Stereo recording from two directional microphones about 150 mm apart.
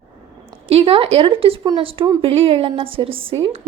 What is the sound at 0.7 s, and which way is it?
Speech, 35° right (ahead or behind).